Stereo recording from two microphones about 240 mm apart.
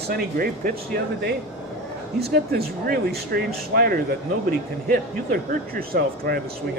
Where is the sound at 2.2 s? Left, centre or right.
Right.